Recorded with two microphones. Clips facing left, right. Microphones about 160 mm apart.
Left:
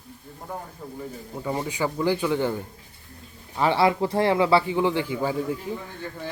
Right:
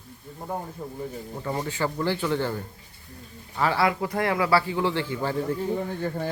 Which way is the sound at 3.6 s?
25° left (ahead or behind).